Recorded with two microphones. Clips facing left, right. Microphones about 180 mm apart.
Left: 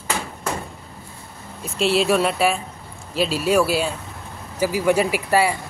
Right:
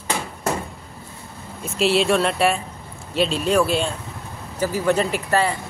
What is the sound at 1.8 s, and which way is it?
Speech, centre (ahead or behind).